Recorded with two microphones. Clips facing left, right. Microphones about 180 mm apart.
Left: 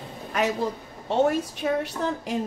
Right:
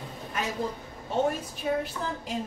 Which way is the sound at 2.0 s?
70° left (ahead or behind).